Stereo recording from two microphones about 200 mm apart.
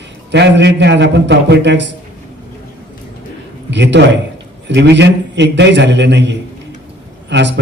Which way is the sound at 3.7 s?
60° right (ahead or behind).